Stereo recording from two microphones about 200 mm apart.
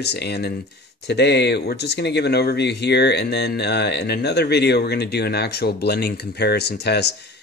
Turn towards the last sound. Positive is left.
turn(degrees=55)  # may be behind; listen again after turning